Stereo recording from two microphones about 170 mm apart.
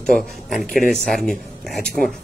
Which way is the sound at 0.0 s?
Centre (ahead or behind).